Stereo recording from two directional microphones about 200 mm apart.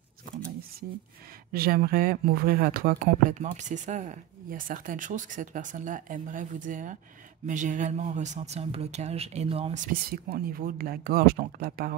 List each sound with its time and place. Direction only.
1.5 s speech: 45° right (ahead or behind); by 9.8 s 30° right (ahead or behind)
9.8 s speech: 50° right (ahead or behind)